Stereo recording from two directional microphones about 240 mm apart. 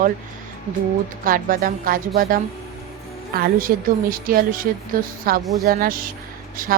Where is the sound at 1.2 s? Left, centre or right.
Right.